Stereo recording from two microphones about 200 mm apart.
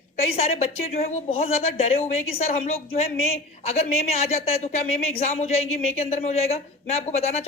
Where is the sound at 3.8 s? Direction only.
30° left (ahead or behind).